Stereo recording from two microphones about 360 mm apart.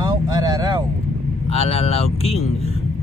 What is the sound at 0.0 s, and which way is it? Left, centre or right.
Vehicle, centre.